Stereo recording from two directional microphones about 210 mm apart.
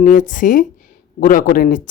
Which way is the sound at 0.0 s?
40° left (ahead or behind).